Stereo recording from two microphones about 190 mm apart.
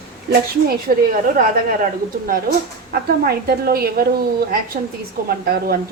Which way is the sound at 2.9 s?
55° right (ahead or behind).